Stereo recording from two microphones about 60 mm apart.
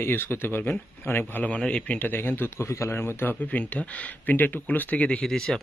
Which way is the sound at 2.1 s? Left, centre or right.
Left.